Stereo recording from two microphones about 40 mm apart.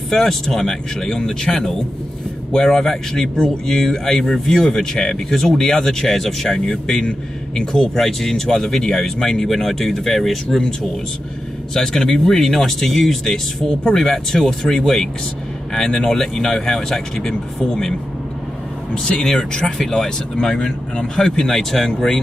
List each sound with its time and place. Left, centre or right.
0.1 s speech: centre
11.7 s speech: centre
19.0 s speech: left
21.5 s speech: centre